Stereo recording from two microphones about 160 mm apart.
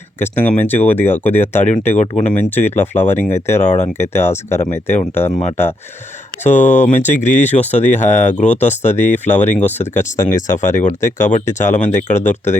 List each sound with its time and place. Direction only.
0.2 s speech: 15° left (ahead or behind)
1.9 s speech: 45° left (ahead or behind)
2.7 s speech: 15° left (ahead or behind)
6.4 s speech: 45° left (ahead or behind)